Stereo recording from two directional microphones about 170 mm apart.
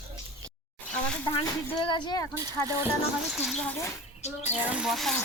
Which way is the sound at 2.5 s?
20° right (ahead or behind).